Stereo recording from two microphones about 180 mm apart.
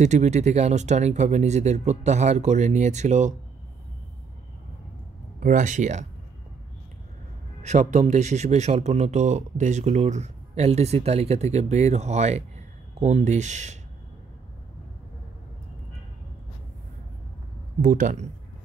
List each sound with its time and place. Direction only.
0.0 s speech: 40° right (ahead or behind)
5.4 s speech: 45° right (ahead or behind)
7.6 s speech: 40° right (ahead or behind)
17.8 s speech: 45° right (ahead or behind)